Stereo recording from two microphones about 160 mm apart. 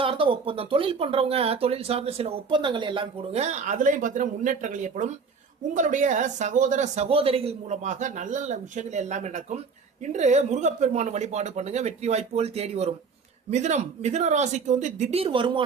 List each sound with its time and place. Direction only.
0.0 s speech: 35° right (ahead or behind)